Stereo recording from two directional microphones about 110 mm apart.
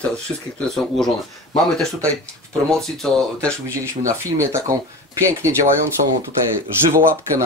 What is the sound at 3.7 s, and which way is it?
Speech, 25° right (ahead or behind).